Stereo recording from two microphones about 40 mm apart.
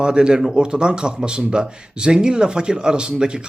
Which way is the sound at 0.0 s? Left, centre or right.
Right.